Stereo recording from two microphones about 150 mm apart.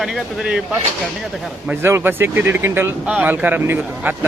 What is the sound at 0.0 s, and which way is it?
Speech, 5° right (ahead or behind).